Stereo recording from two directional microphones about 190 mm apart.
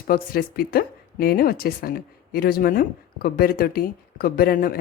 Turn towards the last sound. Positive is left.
turn(degrees=50)  # may be behind; listen again after turning